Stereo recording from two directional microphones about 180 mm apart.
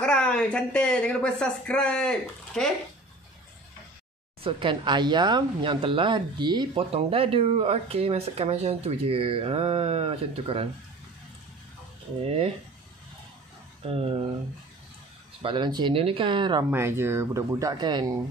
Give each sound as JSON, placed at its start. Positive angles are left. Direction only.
{"t": 0.0, "sound": "speech", "side_deg": 5}
{"t": 4.4, "sound": "speech", "side_deg": -30}
{"t": 12.3, "sound": "speech", "side_deg": -35}
{"t": 13.8, "sound": "speech", "side_deg": -30}
{"t": 15.4, "sound": "speech", "side_deg": -25}
{"t": 16.7, "sound": "speech", "side_deg": -15}